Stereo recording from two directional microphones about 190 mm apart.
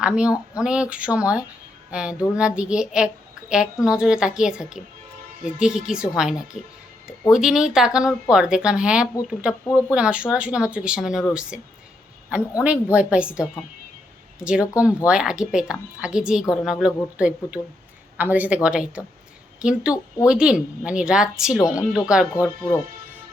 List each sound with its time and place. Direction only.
0.0 s a woman's voice: 5° right (ahead or behind)
21.6 s speech: 15° left (ahead or behind)
21.9 s speech: 5° right (ahead or behind)